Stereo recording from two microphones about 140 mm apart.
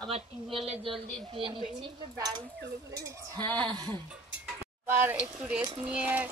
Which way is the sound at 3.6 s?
30° right (ahead or behind).